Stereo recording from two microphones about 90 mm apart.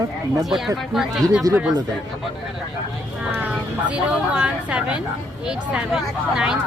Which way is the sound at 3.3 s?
15° right (ahead or behind).